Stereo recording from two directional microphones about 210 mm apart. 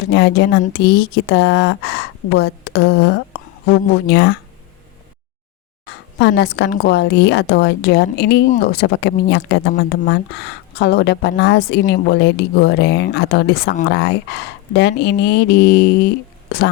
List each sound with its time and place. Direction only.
0.1 s a woman's voice: 55° left (ahead or behind)
6.1 s a woman's voice: 55° left (ahead or behind)